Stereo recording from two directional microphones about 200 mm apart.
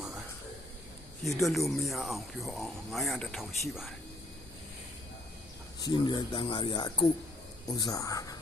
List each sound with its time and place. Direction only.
1.2 s speech: centre (ahead or behind)
5.8 s speech: 20° left (ahead or behind)